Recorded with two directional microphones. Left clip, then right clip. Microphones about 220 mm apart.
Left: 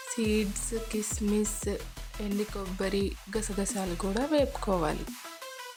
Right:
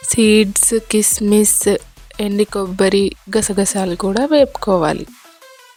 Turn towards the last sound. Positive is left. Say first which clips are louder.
# right 14 dB
turn(degrees=-35)  # may be behind; listen again after turning